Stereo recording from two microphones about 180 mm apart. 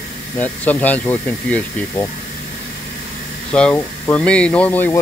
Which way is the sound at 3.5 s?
5° left (ahead or behind).